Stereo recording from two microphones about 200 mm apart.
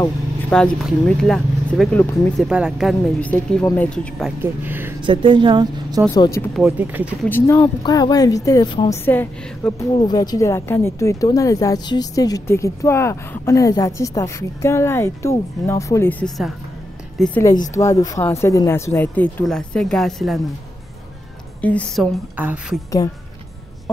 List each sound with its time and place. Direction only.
0.5 s speech: 5° left (ahead or behind)
4.4 s speech: 10° right (ahead or behind)
5.0 s speech: 25° right (ahead or behind)
6.1 s speech: 15° left (ahead or behind)
6.5 s speech: 5° right (ahead or behind)
7.2 s speech: 10° left (ahead or behind)
17.4 s speech: 15° left (ahead or behind); by 20.4 s centre (ahead or behind)
21.5 s a woman's voice: 5° left (ahead or behind)
22.4 s speech: 10° right (ahead or behind)